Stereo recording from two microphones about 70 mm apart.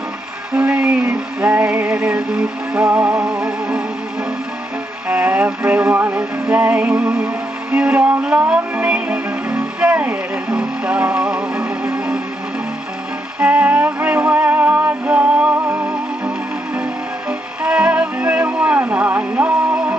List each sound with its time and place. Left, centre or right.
0.5 s music: centre
5.0 s music: right
7.0 s music: centre
13.4 s music: right
17.3 s music: centre